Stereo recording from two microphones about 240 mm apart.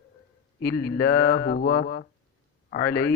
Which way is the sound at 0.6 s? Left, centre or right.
Left.